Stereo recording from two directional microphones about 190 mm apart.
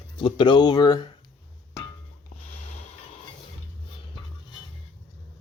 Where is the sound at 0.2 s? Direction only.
25° left (ahead or behind).